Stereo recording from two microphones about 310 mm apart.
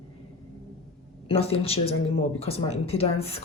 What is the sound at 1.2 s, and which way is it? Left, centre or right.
A woman's voice, centre.